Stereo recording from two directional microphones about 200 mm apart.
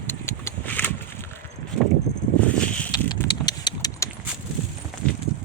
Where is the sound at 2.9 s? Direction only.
20° left (ahead or behind).